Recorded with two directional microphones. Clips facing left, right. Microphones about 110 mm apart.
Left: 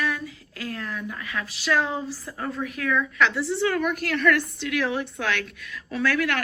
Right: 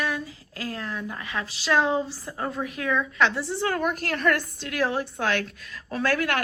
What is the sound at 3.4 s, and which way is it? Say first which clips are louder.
A woman's voice: left 2 dB; 35° right (ahead or behind).